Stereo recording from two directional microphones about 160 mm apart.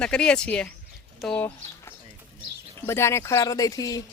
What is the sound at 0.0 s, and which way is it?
Speech, 5° left (ahead or behind).